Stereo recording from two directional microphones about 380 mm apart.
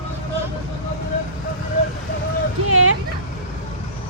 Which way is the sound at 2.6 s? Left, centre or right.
Right.